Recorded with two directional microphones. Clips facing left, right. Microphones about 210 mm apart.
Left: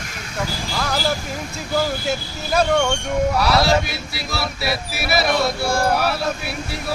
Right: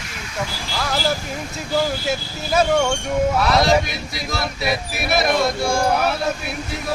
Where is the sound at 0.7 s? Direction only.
Centre (ahead or behind).